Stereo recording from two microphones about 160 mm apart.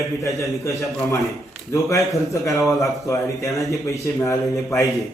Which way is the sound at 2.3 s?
20° left (ahead or behind).